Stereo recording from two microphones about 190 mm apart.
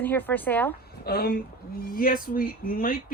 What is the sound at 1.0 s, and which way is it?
Speech, 55° left (ahead or behind).